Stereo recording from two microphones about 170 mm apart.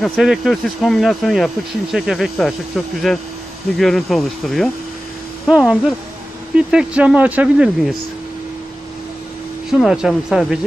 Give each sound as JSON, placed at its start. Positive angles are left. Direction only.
{"t": 0.0, "sound": "speech", "side_deg": 0}
{"t": 9.7, "sound": "speech", "side_deg": 0}